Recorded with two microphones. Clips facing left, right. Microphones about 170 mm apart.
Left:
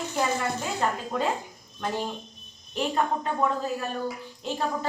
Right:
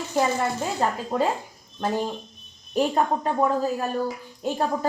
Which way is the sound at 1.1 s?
30° right (ahead or behind).